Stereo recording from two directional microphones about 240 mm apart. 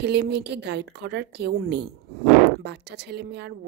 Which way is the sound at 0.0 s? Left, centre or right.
Right.